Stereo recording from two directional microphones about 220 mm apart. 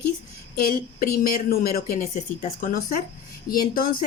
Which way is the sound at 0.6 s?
40° left (ahead or behind).